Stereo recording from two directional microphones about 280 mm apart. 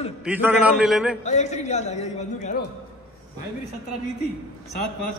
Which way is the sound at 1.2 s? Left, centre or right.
Left.